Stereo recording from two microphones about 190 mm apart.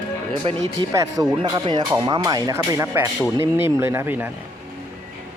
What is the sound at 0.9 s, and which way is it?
Speech, 20° right (ahead or behind).